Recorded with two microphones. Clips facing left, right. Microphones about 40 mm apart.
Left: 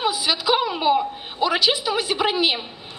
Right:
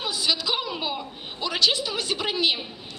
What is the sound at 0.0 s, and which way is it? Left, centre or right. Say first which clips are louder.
A woman's voice: left 4 dB; centre.